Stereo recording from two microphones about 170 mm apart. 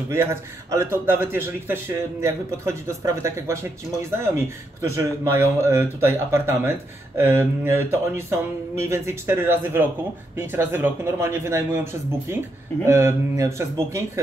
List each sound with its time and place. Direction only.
0.1 s speech: 15° right (ahead or behind)
4.9 s speech: 15° right (ahead or behind)